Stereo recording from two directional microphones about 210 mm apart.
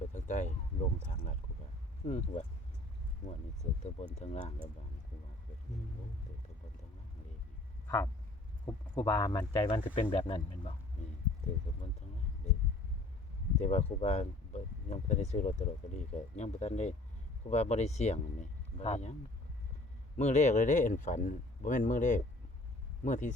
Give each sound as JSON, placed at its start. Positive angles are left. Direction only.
{"t": 0.1, "sound": "a sound", "side_deg": 35}
{"t": 2.0, "sound": "speech", "side_deg": 30}
{"t": 3.2, "sound": "a sound", "side_deg": 35}
{"t": 3.6, "sound": "speech", "side_deg": 30}
{"t": 7.9, "sound": "speech", "side_deg": 15}
{"t": 13.6, "sound": "speech", "side_deg": 30}
{"t": 20.1, "sound": "speech", "side_deg": 35}